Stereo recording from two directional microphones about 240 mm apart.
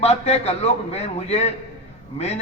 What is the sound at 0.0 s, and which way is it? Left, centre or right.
A man's voice, left.